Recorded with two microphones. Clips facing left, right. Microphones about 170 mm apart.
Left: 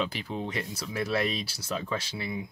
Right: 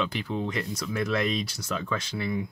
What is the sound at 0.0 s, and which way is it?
Speech, 35° left (ahead or behind).